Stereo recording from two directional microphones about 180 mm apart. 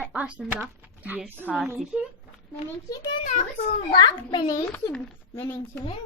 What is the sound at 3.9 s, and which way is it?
A woman's voice, 25° left (ahead or behind).